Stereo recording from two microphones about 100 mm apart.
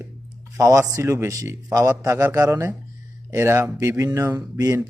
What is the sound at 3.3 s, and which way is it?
Speech, 25° right (ahead or behind).